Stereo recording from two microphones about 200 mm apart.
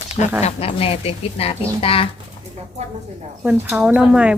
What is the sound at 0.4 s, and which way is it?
Speech, 30° left (ahead or behind).